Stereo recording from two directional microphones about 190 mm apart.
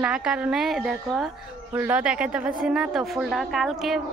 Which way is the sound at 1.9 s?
5° right (ahead or behind).